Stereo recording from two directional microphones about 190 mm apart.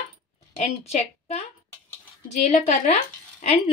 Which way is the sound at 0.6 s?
35° left (ahead or behind).